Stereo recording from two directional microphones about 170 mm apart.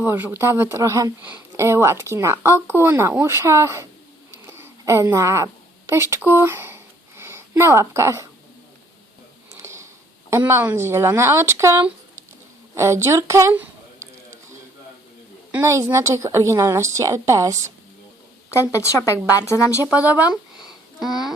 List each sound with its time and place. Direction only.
0.0 s speech: 10° right (ahead or behind)
4.4 s a sound: 15° right (ahead or behind)
9.6 s sniff: 15° right (ahead or behind)
10.2 s a woman's voice: 15° right (ahead or behind)
15.5 s speech: 15° right (ahead or behind)
18.5 s speech: 15° left (ahead or behind)
19.9 s a sound: 10° right (ahead or behind)